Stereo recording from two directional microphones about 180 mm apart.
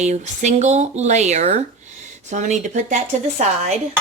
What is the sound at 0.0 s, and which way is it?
Speech, 40° right (ahead or behind).